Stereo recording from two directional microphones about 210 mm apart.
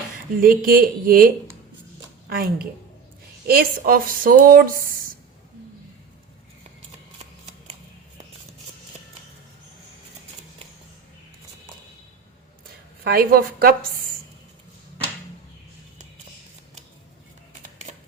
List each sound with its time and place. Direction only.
0.4 s speech: 45° right (ahead or behind)
2.3 s speech: 45° right (ahead or behind)
13.1 s speech: 45° right (ahead or behind)
17.9 s shuffling cards: 35° right (ahead or behind)